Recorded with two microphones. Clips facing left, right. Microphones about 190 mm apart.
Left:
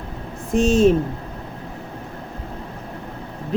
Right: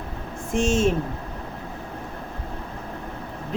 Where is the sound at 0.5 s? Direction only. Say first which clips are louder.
Left 5 dB; 35° left (ahead or behind).